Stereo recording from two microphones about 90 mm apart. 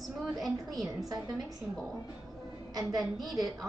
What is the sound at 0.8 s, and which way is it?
Speech, 45° right (ahead or behind).